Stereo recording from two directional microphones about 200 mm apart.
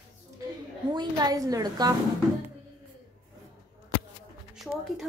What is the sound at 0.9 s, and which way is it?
A woman's voice, 20° right (ahead or behind).